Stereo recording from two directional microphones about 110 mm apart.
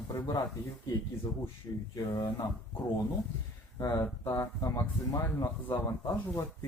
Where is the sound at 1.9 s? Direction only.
35° left (ahead or behind).